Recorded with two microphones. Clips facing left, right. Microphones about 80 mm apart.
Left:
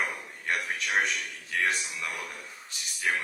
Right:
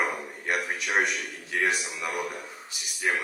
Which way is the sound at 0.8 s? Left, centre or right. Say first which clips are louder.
Right 1 dB; centre.